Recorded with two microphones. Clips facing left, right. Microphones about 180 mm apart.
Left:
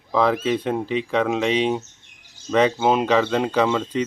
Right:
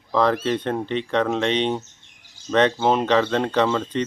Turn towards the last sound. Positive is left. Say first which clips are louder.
# left 1 dB
turn(degrees=5)  # may be behind; listen again after turning